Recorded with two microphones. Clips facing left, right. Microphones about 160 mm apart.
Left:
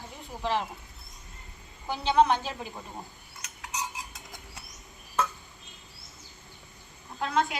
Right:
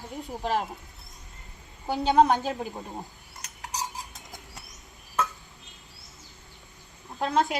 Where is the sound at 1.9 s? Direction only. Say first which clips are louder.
Right 2 dB; 45° right (ahead or behind).